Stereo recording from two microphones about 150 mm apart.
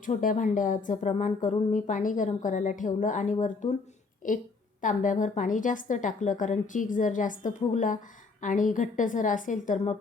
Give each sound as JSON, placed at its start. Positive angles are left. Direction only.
{"t": 0.0, "sound": "speech", "side_deg": 65}